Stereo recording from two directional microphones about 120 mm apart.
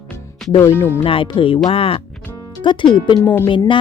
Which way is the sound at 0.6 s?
20° left (ahead or behind).